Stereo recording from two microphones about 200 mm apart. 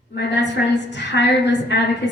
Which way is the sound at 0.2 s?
60° left (ahead or behind).